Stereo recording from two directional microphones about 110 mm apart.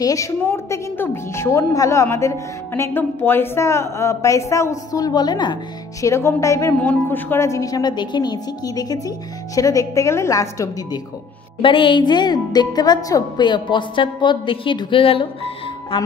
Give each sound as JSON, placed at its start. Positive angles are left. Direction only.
{"t": 0.0, "sound": "a woman's voice", "side_deg": 30}
{"t": 5.9, "sound": "a woman's voice", "side_deg": 25}
{"t": 6.8, "sound": "a woman's voice", "side_deg": 15}
{"t": 11.6, "sound": "a woman's voice", "side_deg": 50}